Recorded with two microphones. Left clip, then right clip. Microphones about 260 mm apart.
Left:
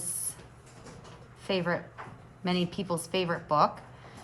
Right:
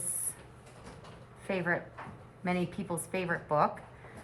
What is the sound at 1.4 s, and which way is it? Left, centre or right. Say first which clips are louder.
A woman's voice: left 2 dB; centre.